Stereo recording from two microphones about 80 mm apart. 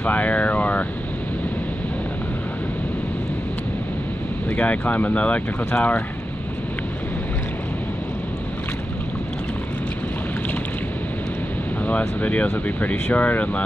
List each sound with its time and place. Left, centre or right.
0.0 s speech: centre
4.5 s speech: centre
12.0 s speech: centre